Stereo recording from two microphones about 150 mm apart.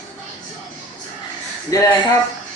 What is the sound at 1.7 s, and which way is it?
Speech, 20° left (ahead or behind).